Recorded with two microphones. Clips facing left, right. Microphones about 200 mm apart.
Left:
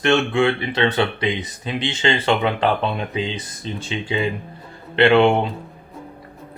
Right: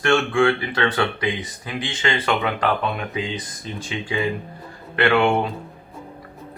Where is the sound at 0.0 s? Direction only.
20° left (ahead or behind).